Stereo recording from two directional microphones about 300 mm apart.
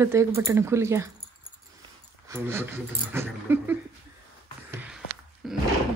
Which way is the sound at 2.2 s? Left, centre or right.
Centre.